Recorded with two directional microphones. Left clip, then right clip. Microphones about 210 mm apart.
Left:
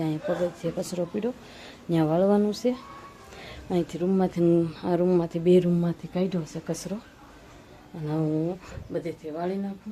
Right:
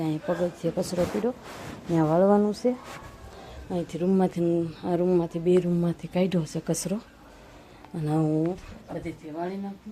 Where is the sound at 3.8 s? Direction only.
Centre (ahead or behind).